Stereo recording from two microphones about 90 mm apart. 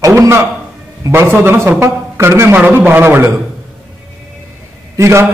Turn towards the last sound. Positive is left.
turn(degrees=-30)  # may be behind; listen again after turning